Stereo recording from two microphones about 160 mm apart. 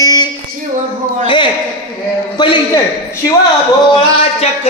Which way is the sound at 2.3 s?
30° left (ahead or behind).